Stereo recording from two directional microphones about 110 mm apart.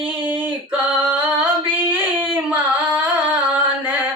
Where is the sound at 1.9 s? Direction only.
15° right (ahead or behind).